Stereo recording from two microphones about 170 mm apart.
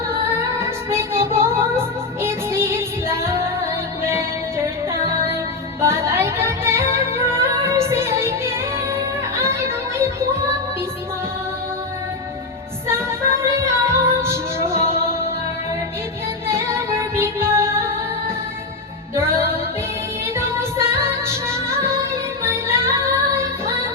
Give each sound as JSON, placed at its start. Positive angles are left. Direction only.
{"t": 0.6, "sound": "music", "side_deg": -15}
{"t": 12.9, "sound": "music", "side_deg": -15}
{"t": 16.5, "sound": "music", "side_deg": -15}
{"t": 19.1, "sound": "music", "side_deg": -15}